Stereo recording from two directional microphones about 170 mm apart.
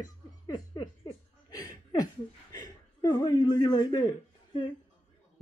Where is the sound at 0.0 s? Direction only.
25° left (ahead or behind).